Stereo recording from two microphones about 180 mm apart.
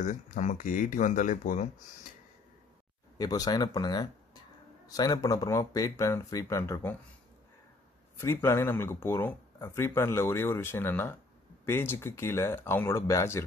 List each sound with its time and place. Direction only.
0.0 s speech: 45° left (ahead or behind)
3.2 s speech: 20° left (ahead or behind)
8.2 s speech: 15° left (ahead or behind)